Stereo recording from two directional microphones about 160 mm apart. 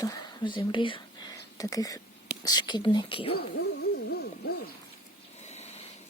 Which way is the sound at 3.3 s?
85° left.